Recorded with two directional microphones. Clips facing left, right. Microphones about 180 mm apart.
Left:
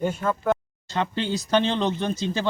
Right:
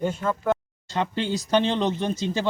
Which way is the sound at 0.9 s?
10° right (ahead or behind).